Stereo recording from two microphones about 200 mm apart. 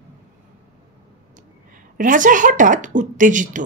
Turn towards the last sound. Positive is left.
turn(degrees=-40)  # may be behind; listen again after turning